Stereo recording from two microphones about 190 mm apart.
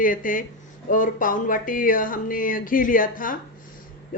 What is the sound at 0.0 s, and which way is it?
A woman's voice, 45° left (ahead or behind).